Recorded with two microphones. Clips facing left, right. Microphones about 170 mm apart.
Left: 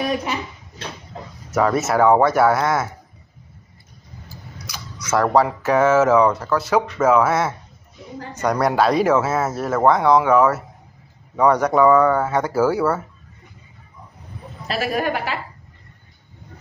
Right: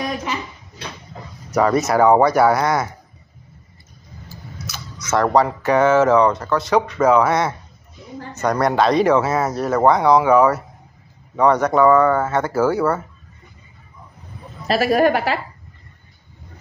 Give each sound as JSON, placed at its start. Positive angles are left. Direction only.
{"t": 1.5, "sound": "speech", "side_deg": 0}
{"t": 4.6, "sound": "speech", "side_deg": 10}
{"t": 14.7, "sound": "a woman's voice", "side_deg": -65}